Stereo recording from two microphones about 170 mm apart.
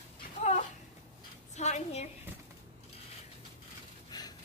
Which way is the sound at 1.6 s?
40° left (ahead or behind).